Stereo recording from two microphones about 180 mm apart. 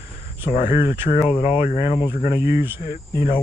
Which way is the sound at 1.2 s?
30° left (ahead or behind).